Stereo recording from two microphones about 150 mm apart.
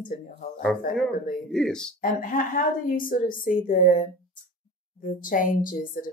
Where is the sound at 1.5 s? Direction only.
5° left (ahead or behind).